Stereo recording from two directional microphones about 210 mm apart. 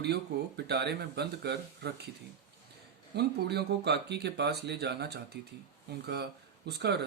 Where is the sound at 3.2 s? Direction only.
50° right (ahead or behind).